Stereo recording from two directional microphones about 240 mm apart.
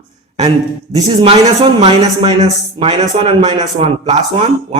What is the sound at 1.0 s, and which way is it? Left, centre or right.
A man's voice, centre.